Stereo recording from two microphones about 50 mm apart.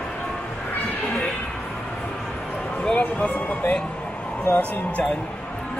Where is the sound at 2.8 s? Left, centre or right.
Left.